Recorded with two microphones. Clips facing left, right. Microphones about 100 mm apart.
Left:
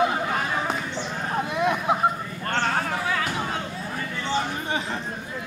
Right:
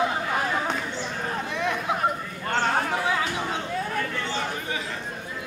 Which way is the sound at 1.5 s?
15° left (ahead or behind).